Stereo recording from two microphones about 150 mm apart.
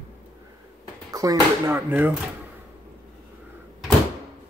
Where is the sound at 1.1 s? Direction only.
20° right (ahead or behind).